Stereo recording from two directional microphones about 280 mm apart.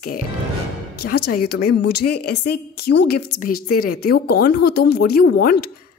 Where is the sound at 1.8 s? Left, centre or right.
Left.